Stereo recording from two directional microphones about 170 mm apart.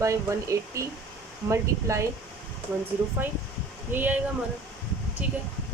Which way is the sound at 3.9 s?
10° right (ahead or behind).